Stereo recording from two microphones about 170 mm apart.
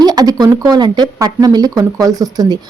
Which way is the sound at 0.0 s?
20° right (ahead or behind).